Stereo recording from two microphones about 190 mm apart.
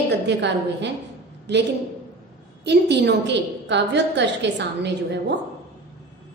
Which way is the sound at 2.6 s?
60° right (ahead or behind).